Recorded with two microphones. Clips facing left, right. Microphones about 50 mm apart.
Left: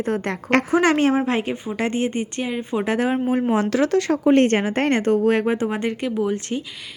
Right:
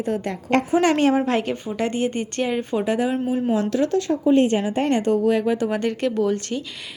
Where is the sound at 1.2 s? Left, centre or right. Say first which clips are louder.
Even; left.